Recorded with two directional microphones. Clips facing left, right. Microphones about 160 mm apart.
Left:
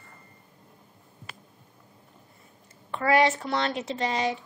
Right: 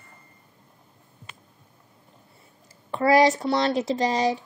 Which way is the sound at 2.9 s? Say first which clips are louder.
Right 4 dB; 35° right (ahead or behind).